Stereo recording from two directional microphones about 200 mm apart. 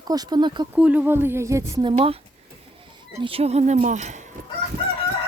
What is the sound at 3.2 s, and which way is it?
Speech, 30° right (ahead or behind).